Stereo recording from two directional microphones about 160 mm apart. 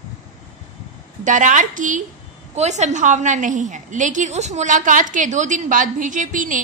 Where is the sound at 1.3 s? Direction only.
50° right (ahead or behind).